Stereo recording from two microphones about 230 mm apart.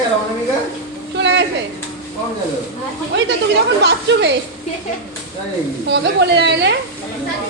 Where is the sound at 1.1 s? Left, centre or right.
Right.